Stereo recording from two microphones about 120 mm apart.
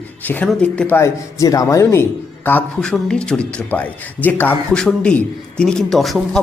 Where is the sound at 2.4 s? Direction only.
10° left (ahead or behind).